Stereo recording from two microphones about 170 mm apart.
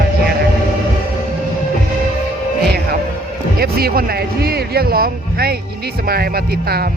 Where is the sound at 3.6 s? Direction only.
65° right (ahead or behind).